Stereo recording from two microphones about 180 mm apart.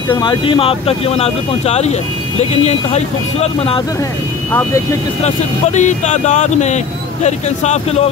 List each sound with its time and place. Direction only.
0.2 s speech: 25° left (ahead or behind)
4.5 s speech: 10° left (ahead or behind)
5.2 s speech: 40° left (ahead or behind)